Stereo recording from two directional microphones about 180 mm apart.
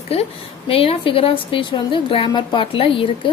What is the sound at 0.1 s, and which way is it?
A woman's voice, 35° left (ahead or behind).